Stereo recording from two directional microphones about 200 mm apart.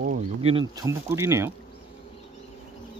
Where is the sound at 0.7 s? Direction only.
15° right (ahead or behind).